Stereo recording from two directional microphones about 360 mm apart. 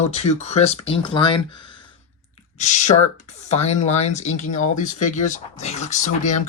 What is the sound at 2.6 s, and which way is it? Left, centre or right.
Speech, centre.